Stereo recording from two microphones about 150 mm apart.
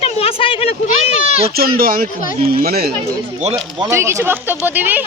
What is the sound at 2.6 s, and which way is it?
Speech, 90° right.